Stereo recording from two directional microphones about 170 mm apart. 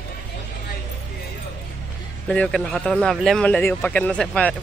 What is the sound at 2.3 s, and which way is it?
Speech, 5° left (ahead or behind).